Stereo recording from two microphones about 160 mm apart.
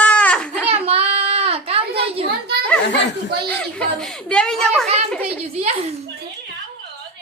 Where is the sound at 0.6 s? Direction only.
40° right (ahead or behind).